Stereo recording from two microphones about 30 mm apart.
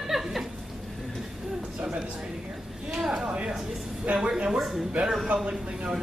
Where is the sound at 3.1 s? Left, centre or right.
Right.